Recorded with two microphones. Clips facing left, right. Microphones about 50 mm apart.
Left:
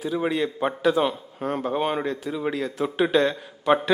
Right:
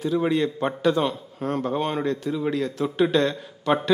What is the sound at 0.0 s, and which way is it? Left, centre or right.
A man's voice, centre.